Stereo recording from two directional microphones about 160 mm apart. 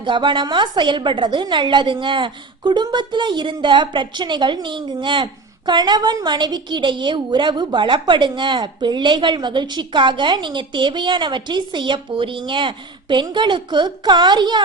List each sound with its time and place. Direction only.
0.0 s a woman's voice: 30° right (ahead or behind)